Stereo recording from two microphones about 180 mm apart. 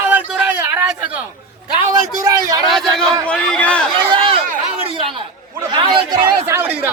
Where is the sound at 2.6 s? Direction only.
Centre (ahead or behind).